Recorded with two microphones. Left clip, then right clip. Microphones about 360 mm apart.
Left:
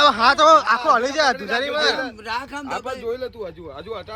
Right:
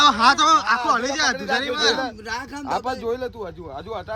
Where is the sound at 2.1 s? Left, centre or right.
Centre.